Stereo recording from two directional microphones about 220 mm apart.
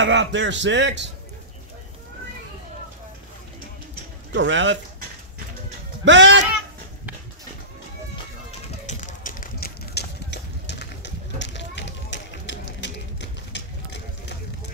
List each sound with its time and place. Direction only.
0.0 s speech: 55° right (ahead or behind)
4.3 s speech: 55° right (ahead or behind)
6.0 s speech: 55° right (ahead or behind)
8.5 s run: 35° left (ahead or behind); by 14.0 s 50° left (ahead or behind)